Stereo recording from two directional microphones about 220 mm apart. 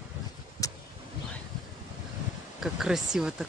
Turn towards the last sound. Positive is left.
turn(degrees=-5)  # may be behind; listen again after turning